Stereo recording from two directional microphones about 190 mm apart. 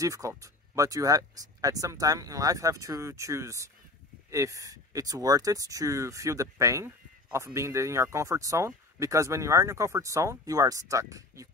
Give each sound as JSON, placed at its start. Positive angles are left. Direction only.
{"t": 0.0, "sound": "speech", "side_deg": -15}